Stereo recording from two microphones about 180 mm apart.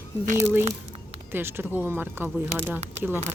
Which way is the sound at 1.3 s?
10° right (ahead or behind).